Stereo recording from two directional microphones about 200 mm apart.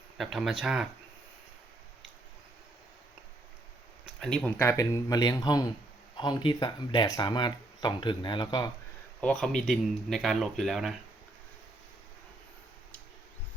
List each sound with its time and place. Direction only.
0.2 s speech: centre (ahead or behind)
4.0 s speech: centre (ahead or behind); by 8.7 s 20° left (ahead or behind)
9.2 s speech: centre (ahead or behind)